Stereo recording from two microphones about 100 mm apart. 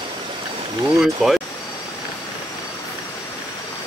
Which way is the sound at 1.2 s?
5° right (ahead or behind).